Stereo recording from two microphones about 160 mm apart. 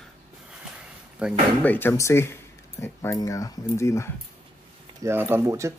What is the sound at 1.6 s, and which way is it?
Speech, 15° left (ahead or behind).